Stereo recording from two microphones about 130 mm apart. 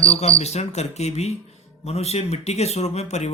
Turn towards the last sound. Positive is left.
turn(degrees=60)  # may be behind; listen again after turning